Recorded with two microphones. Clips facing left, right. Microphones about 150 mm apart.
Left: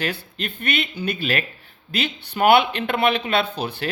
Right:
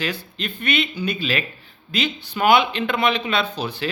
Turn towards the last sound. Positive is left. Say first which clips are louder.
# left 1 dB
turn(degrees=55)  # may be behind; listen again after turning